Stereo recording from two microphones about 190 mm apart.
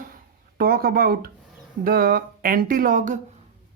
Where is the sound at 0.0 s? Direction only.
50° right (ahead or behind).